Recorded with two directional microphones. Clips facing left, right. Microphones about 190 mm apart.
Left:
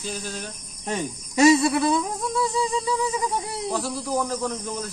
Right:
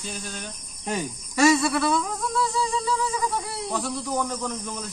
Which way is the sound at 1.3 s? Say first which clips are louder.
Left 3 dB; 20° left (ahead or behind).